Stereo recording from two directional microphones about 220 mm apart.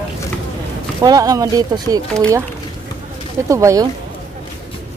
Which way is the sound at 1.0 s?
15° right (ahead or behind).